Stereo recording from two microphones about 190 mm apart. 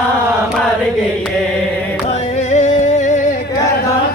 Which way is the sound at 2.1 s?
35° left (ahead or behind).